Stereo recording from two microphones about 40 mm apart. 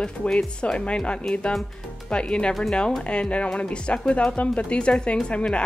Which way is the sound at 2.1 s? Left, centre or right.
Left.